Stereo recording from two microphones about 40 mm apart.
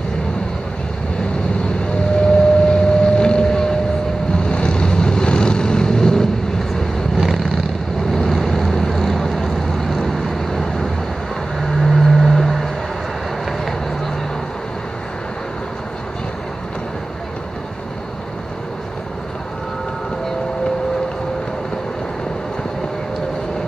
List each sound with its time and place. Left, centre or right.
2.1 s boat: left
4.3 s vehicle: left
7.2 s vehicle: centre